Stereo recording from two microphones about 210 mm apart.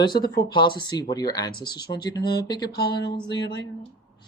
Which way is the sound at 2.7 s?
50° left (ahead or behind).